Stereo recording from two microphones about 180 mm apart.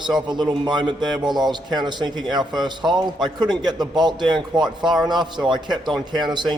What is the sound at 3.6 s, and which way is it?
Speech, 25° right (ahead or behind).